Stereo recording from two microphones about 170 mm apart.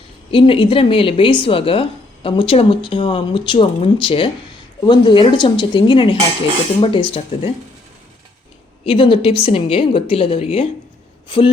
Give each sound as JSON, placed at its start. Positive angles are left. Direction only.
{"t": 0.3, "sound": "speech", "side_deg": 30}
{"t": 8.8, "sound": "speech", "side_deg": 30}
{"t": 11.3, "sound": "a sound", "side_deg": 30}